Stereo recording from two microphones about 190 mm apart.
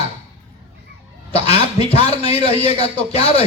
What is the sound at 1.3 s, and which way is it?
A man's voice, 30° left (ahead or behind).